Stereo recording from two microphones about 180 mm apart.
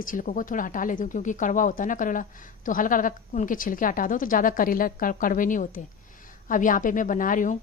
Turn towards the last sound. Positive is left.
turn(degrees=45)  # may be behind; listen again after turning